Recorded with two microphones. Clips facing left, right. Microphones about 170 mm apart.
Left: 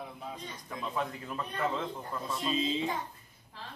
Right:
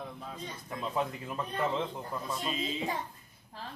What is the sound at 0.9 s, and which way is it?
Speech, 20° right (ahead or behind).